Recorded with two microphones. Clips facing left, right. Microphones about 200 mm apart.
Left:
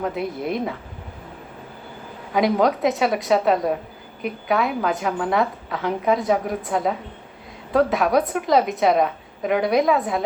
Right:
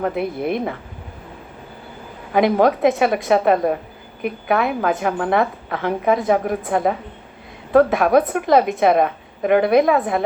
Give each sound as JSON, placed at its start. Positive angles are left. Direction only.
{"t": 0.0, "sound": "a woman's voice", "side_deg": -55}
{"t": 2.3, "sound": "a woman's voice", "side_deg": -55}